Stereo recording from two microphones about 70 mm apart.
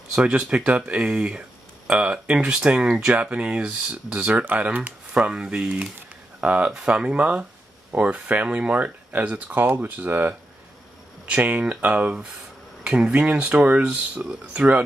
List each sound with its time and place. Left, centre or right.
0.1 s speech: centre